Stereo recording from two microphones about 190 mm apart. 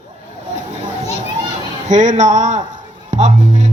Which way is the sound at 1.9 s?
40° right (ahead or behind).